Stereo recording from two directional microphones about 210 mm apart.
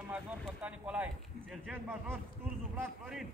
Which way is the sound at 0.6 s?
5° right (ahead or behind).